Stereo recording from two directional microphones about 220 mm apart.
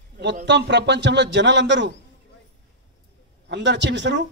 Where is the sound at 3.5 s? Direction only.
55° right (ahead or behind).